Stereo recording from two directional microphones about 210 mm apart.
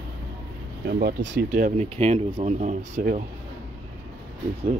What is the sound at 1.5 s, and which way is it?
Speech, 35° right (ahead or behind).